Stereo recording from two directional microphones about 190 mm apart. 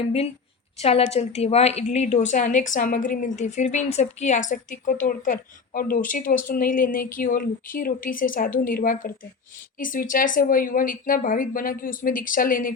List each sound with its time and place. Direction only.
0.8 s a woman's voice: 30° left (ahead or behind); by 12.7 s 45° left (ahead or behind)